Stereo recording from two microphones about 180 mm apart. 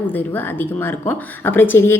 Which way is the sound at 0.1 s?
10° left (ahead or behind).